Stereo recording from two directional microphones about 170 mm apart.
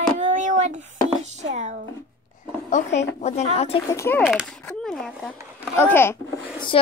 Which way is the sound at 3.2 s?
40° left (ahead or behind).